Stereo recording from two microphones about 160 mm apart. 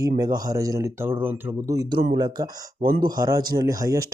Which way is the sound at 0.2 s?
25° right (ahead or behind).